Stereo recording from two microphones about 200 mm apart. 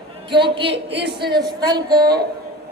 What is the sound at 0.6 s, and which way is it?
Speech, 60° right (ahead or behind).